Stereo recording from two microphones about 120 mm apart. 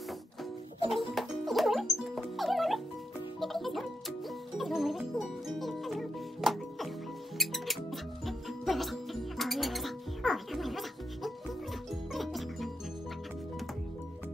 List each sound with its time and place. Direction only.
0.8 s music: centre (ahead or behind)